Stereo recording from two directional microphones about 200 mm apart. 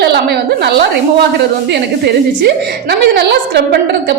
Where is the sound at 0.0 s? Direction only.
55° right (ahead or behind).